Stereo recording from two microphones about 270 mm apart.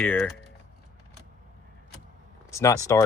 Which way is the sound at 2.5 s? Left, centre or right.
Centre.